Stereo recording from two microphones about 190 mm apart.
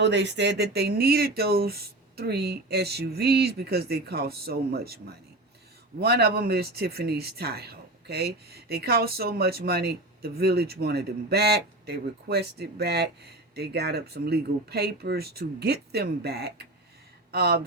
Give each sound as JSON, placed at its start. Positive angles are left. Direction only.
{"t": 0.0, "sound": "speech", "side_deg": -65}